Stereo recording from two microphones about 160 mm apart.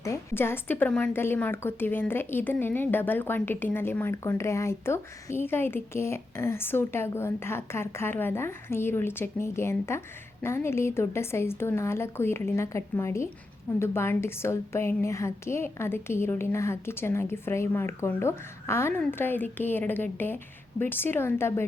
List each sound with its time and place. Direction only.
0.0 s a woman's voice: 20° left (ahead or behind)